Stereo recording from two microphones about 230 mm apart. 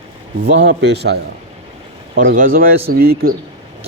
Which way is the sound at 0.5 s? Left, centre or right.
Right.